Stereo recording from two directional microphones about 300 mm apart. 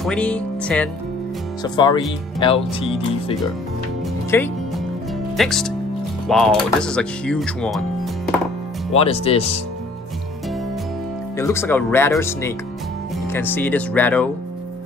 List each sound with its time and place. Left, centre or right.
0.0 s speech: centre
4.3 s music: centre
5.4 s speech: centre
8.9 s speech: centre
11.3 s speech: centre